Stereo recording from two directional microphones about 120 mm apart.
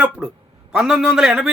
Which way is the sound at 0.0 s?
10° right (ahead or behind).